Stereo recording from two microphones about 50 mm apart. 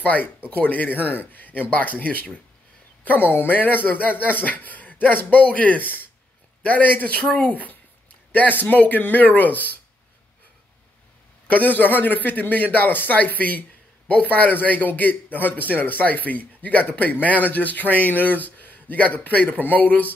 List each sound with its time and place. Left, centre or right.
0.0 s a man's voice: left
3.3 s a man's voice: left
11.4 s a man's voice: left